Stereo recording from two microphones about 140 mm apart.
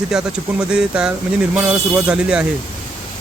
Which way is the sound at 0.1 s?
5° right (ahead or behind).